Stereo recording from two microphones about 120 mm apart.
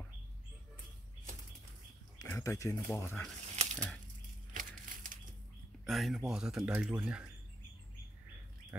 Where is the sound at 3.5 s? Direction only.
75° right (ahead or behind).